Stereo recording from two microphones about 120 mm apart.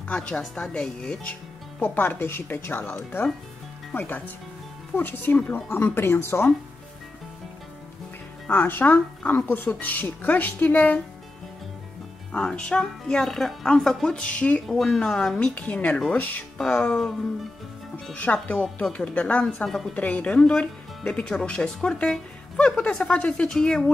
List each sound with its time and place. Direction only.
0.1 s speech: 10° left (ahead or behind)
1.8 s speech: 15° left (ahead or behind)
8.5 s speech: 15° left (ahead or behind)
12.3 s speech: 5° left (ahead or behind)